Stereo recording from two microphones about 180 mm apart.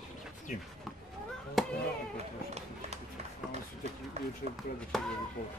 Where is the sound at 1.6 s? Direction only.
Centre (ahead or behind).